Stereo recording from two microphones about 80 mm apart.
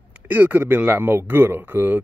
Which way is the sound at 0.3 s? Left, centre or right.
Right.